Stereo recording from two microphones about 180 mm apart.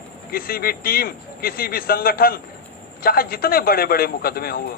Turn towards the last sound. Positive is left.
turn(degrees=55)  # may be behind; listen again after turning